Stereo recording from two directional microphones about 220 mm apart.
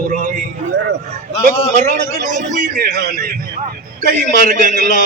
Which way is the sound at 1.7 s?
35° right (ahead or behind).